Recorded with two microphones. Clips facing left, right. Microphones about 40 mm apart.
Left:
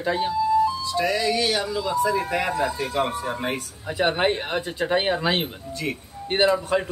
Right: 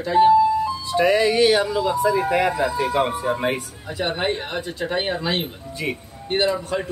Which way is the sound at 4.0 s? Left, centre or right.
Centre.